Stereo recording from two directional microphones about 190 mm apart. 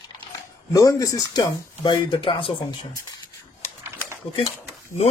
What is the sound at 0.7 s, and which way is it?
Speech, 15° left (ahead or behind).